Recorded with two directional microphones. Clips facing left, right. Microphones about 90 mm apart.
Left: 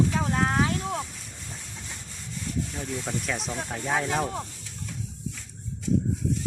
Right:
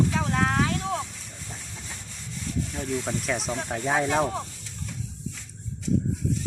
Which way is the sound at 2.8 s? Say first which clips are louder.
Right 3 dB; 5° right (ahead or behind).